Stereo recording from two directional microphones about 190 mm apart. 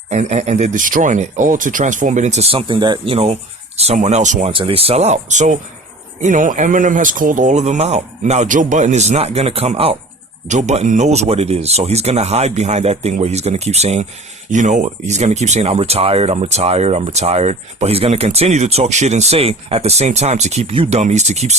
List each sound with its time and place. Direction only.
0.1 s speech: 35° right (ahead or behind)
4.5 s speech: 30° right (ahead or behind)